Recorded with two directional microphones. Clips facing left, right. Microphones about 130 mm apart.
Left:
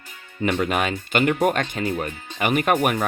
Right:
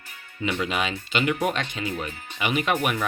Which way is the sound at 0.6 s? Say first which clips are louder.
Left 4 dB; 50° left (ahead or behind).